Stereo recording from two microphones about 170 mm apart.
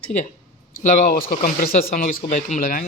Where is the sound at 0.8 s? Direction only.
55° left (ahead or behind).